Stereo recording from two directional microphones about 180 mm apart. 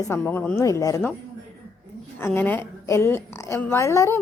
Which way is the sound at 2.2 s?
10° left (ahead or behind).